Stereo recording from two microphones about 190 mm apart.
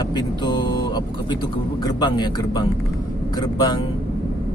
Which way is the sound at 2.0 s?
20° left (ahead or behind).